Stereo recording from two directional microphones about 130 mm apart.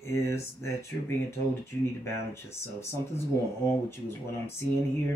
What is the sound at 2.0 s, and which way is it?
Speech, 20° left (ahead or behind).